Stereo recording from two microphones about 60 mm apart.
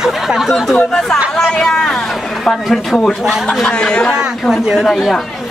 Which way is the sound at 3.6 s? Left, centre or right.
Centre.